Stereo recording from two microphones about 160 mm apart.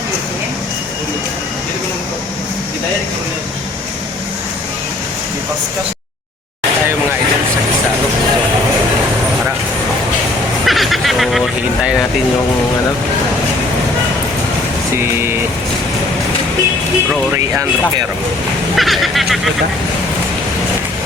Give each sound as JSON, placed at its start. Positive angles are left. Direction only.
{"t": 10.7, "sound": "vehicle", "side_deg": 0}
{"t": 14.9, "sound": "vehicle", "side_deg": -15}
{"t": 17.3, "sound": "a sound", "side_deg": -15}
{"t": 18.8, "sound": "vehicle", "side_deg": 0}